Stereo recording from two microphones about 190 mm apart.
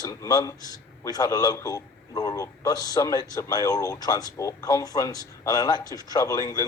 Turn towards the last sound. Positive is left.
turn(degrees=20)  # may be behind; listen again after turning